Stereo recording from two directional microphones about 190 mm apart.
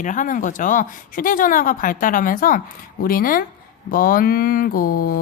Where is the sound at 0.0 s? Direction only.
40° left (ahead or behind).